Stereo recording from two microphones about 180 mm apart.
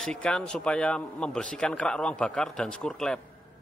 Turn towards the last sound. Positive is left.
turn(degrees=5)  # may be behind; listen again after turning